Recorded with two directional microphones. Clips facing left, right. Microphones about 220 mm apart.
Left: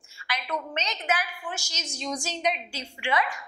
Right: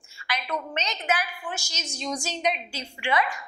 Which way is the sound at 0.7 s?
10° right (ahead or behind).